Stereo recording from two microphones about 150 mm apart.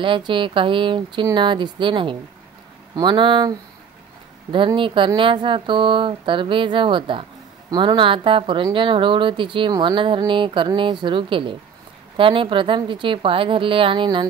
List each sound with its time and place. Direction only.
0.0 s speech: 35° right (ahead or behind)